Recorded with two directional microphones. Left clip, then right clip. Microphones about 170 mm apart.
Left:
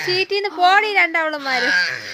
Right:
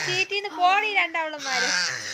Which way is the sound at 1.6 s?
10° left (ahead or behind).